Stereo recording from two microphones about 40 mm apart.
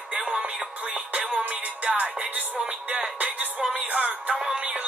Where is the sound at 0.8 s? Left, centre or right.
Right.